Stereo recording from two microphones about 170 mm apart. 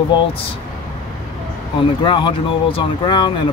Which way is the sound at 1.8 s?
30° left (ahead or behind).